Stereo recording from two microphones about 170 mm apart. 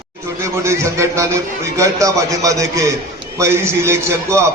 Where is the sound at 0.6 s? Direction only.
15° right (ahead or behind).